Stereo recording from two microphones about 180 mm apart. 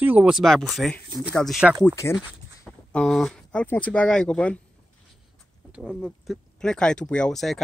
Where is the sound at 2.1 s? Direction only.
5° left (ahead or behind).